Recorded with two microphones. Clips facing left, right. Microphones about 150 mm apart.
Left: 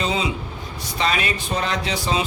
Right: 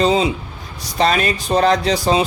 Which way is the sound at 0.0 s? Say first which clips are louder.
Right 8 dB; 35° right (ahead or behind).